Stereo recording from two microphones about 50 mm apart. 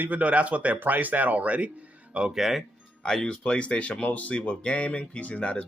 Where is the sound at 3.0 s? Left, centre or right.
Centre.